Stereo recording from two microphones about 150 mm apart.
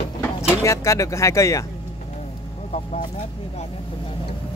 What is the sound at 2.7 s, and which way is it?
Speech, 50° left (ahead or behind).